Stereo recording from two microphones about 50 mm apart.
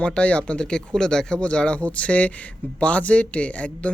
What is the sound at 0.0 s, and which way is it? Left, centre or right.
Speech, left.